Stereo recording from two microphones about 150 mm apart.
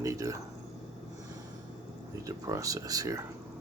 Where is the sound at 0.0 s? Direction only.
20° right (ahead or behind).